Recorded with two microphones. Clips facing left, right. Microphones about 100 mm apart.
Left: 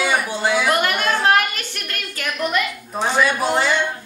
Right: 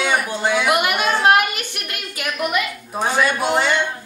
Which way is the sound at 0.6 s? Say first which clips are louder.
Right 1 dB; 15° right (ahead or behind).